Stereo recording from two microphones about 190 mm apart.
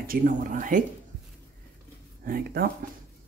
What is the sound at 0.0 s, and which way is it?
Speech, 50° right (ahead or behind).